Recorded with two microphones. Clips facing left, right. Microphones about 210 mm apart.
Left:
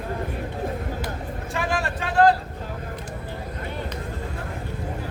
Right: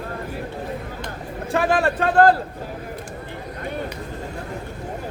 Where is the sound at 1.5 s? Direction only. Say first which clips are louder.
Right 8 dB; 60° right (ahead or behind).